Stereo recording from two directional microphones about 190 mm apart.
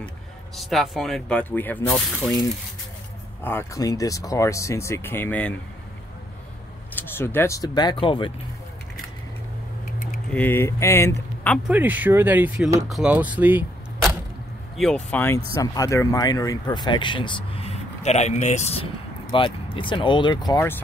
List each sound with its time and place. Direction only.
0.6 s speech: centre (ahead or behind)
3.4 s speech: 15° left (ahead or behind)
7.0 s speech: 10° left (ahead or behind)
10.3 s speech: 10° left (ahead or behind)
11.7 s speech: 10° right (ahead or behind)
14.8 s speech: 5° left (ahead or behind)